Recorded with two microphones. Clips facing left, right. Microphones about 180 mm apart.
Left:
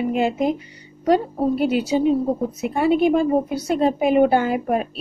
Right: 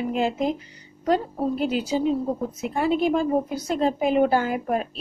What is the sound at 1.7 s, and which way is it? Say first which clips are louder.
Speech: left 5 dB; 65° left (ahead or behind).